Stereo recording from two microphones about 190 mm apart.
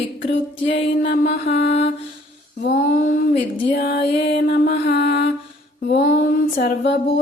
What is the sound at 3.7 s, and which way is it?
Music, 55° left (ahead or behind).